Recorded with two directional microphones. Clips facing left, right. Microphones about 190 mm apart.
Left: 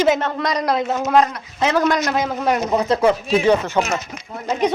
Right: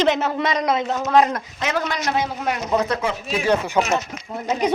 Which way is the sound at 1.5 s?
30° left (ahead or behind).